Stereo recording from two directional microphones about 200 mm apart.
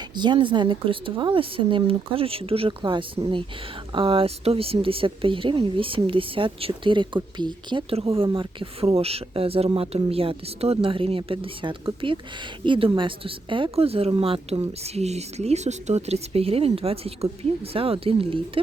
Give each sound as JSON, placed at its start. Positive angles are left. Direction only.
{"t": 0.2, "sound": "a woman's voice", "side_deg": -25}